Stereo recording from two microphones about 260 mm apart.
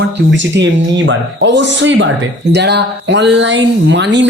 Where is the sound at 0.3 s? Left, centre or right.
Right.